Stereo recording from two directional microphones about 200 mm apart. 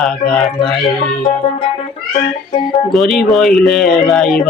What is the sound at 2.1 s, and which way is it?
Speech, 25° left (ahead or behind).